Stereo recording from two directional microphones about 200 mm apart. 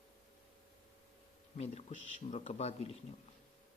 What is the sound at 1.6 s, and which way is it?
Speech, 35° left (ahead or behind).